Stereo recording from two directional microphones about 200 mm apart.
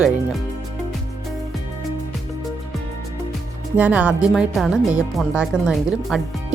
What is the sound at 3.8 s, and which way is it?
Speech, 10° right (ahead or behind).